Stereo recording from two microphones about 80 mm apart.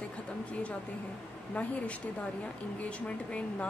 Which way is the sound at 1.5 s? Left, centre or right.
Centre.